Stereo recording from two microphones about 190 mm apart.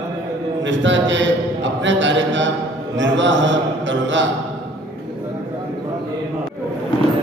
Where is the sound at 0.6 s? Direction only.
75° right (ahead or behind).